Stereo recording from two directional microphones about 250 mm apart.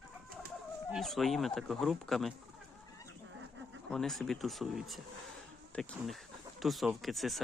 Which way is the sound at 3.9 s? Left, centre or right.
Centre.